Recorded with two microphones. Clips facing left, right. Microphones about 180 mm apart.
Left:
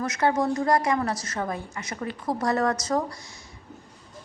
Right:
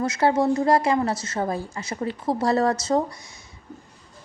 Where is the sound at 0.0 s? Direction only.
30° right (ahead or behind).